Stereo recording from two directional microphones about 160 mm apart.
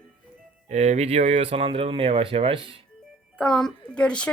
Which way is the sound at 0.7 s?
45° right (ahead or behind).